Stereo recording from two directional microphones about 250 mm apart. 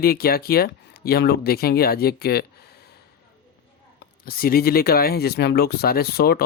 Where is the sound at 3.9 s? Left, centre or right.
Left.